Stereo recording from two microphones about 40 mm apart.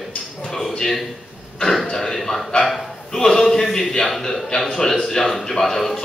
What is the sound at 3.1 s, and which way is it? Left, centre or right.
A man's voice, centre.